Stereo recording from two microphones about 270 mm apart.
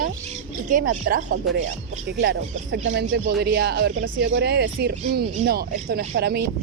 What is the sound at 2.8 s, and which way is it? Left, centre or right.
Speech, right.